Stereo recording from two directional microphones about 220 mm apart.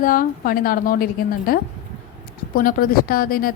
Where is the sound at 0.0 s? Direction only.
40° left (ahead or behind).